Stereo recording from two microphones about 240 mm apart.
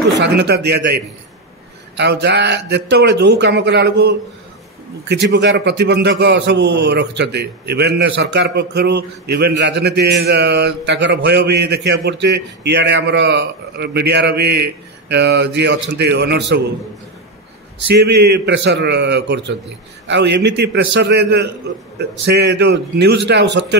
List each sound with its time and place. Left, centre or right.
0.2 s a man's voice: right
17.9 s a man's voice: right